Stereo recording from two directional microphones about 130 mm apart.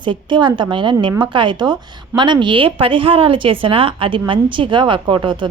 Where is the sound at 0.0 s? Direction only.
40° right (ahead or behind).